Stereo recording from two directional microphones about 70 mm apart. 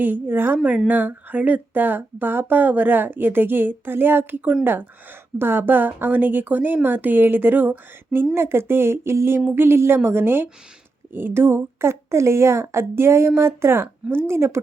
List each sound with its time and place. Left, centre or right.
0.0 s a woman's voice: right